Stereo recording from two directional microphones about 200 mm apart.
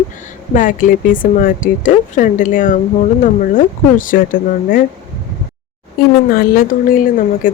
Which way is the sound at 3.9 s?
45° left (ahead or behind).